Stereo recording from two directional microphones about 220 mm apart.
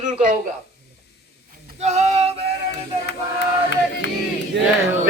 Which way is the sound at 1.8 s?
30° right (ahead or behind).